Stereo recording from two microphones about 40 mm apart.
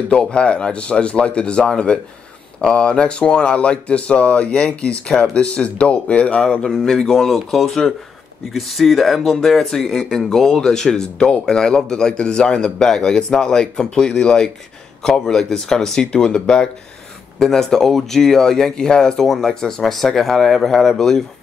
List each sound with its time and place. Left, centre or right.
0.1 s speech: left
6.6 s speech: centre
8.5 s speech: centre
16.1 s speech: left
17.4 s speech: centre
19.2 s speech: centre